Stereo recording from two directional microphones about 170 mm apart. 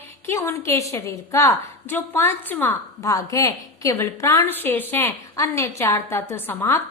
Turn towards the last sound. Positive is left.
turn(degrees=15)  # may be behind; listen again after turning